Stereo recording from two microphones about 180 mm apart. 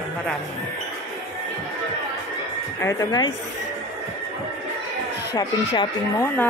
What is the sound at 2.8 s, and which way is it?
Speech, 20° left (ahead or behind).